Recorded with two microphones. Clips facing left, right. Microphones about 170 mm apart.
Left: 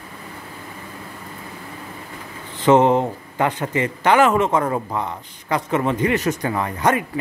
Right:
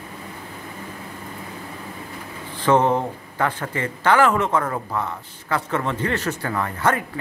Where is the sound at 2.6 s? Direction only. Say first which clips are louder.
Left 4 dB; 20° left (ahead or behind).